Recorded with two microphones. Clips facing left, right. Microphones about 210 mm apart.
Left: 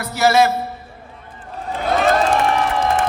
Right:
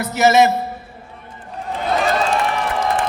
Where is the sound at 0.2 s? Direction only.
20° right (ahead or behind).